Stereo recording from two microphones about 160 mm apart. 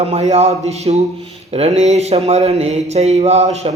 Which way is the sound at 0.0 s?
45° right (ahead or behind).